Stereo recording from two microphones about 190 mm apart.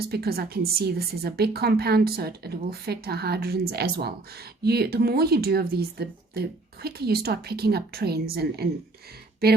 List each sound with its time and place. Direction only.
0.0 s a woman's voice: 55° right (ahead or behind)